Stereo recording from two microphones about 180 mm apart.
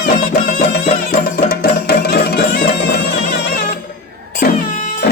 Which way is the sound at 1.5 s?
55° left (ahead or behind).